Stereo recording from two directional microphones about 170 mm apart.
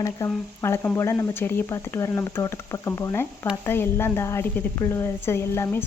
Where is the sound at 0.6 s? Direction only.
15° left (ahead or behind).